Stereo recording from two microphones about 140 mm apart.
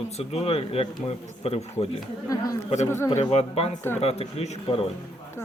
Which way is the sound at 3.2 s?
50° left (ahead or behind).